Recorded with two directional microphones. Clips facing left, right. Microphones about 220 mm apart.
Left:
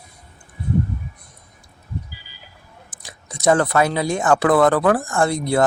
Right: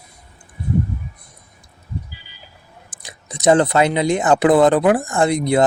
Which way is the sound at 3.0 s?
20° right (ahead or behind).